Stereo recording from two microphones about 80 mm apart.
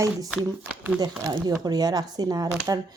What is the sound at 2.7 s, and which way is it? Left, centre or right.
Speech, right.